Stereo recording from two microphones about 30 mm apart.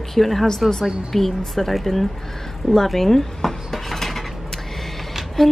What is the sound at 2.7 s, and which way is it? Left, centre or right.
Dishes, centre.